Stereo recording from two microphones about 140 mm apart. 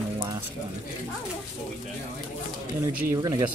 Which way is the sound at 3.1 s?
30° right (ahead or behind).